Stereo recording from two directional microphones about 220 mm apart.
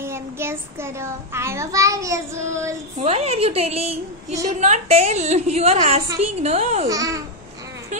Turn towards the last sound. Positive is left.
turn(degrees=-15)  # may be behind; listen again after turning